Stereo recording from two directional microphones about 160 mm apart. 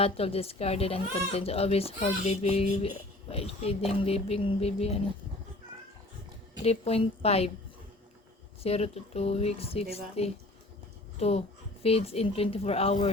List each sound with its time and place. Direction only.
0.0 s speech: 40° left (ahead or behind)
2.0 s child singing: 45° left (ahead or behind)
3.2 s speech: 40° left (ahead or behind)
6.6 s speech: 40° left (ahead or behind)
8.6 s speech: 40° left (ahead or behind)